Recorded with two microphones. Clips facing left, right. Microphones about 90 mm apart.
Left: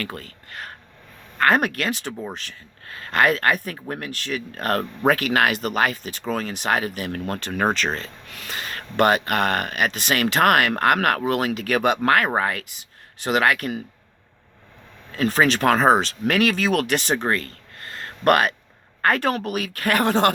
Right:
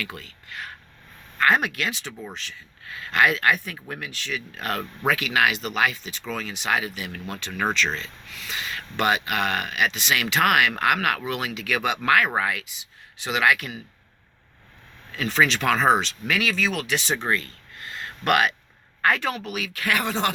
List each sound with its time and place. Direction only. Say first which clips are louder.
0.0 s speech: left 4 dB; 45° left (ahead or behind)
15.1 s speech: left 3 dB; 40° left (ahead or behind)